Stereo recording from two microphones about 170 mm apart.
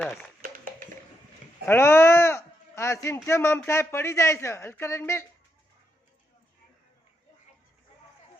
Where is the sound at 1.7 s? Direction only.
15° left (ahead or behind).